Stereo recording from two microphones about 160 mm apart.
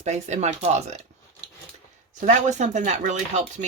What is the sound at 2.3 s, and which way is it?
Speech, 50° right (ahead or behind).